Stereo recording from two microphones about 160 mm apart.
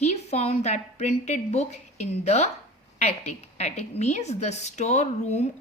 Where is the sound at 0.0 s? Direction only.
45° left (ahead or behind).